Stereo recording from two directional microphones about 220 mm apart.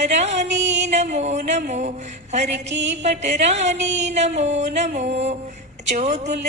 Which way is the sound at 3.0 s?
30° right (ahead or behind).